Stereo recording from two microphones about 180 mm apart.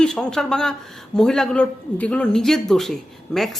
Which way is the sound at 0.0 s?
5° left (ahead or behind).